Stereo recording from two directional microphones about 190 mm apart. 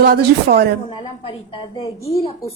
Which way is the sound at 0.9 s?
30° left (ahead or behind).